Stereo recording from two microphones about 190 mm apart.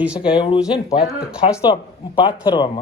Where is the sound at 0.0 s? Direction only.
5° right (ahead or behind).